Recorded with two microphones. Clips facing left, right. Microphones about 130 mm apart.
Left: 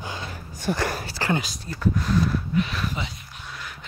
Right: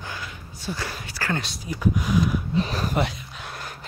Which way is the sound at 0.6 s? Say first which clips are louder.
Left 6 dB; 50° left (ahead or behind).